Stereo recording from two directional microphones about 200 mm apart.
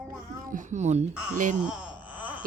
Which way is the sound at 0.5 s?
35° right (ahead or behind).